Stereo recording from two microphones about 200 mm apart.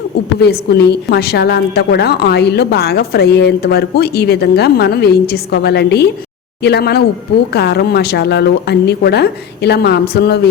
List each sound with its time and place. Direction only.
0.3 s a woman's voice: 55° left (ahead or behind)